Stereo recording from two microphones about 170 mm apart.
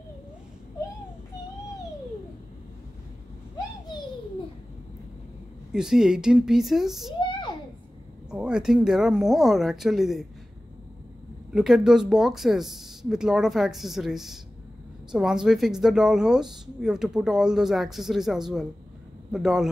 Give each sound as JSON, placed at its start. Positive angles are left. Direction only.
{"t": 5.7, "sound": "speech", "side_deg": -5}
{"t": 7.2, "sound": "a sound", "side_deg": 30}
{"t": 8.3, "sound": "speech", "side_deg": -5}
{"t": 11.5, "sound": "speech", "side_deg": -5}